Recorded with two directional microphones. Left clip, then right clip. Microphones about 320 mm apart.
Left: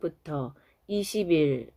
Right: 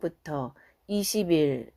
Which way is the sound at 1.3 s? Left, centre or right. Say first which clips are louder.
Even; centre.